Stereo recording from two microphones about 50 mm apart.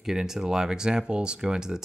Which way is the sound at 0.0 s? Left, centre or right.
Centre.